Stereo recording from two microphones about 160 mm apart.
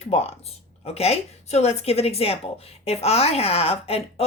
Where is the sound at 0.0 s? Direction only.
40° left (ahead or behind).